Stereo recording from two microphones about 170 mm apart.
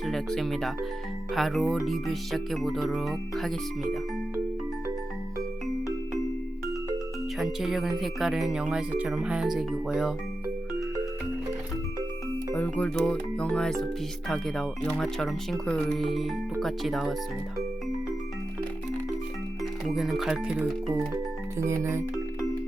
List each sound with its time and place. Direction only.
0.0 s speech: centre (ahead or behind)
7.3 s speech: centre (ahead or behind)
12.5 s speech: 5° left (ahead or behind)
19.8 s speech: centre (ahead or behind)
21.6 s speech: 15° right (ahead or behind)